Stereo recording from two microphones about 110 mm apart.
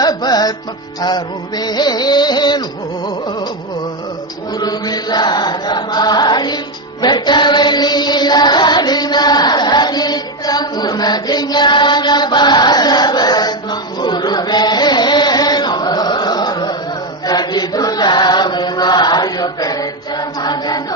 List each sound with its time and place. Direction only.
0.0 s music: 35° left (ahead or behind)
4.6 s chant: 35° left (ahead or behind)
7.0 s music: 40° left (ahead or behind)
17.2 s chant: 40° left (ahead or behind)